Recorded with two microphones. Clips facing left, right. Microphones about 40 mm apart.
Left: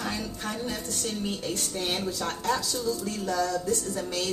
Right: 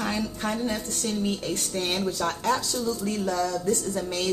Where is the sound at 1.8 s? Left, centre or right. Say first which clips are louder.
Right 3 dB; centre; by 3.8 s right.